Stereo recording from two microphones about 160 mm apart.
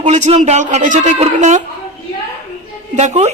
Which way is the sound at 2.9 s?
45° right (ahead or behind).